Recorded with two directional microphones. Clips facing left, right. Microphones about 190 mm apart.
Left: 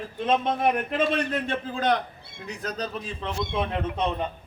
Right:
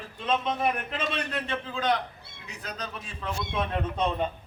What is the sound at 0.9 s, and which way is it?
A man's voice, 50° left (ahead or behind).